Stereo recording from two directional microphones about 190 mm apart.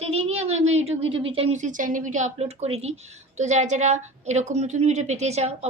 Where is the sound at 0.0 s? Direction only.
30° right (ahead or behind).